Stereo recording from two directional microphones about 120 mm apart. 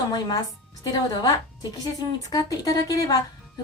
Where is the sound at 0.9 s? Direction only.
35° left (ahead or behind).